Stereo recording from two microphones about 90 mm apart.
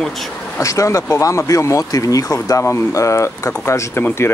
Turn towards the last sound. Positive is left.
turn(degrees=30)  # may be behind; listen again after turning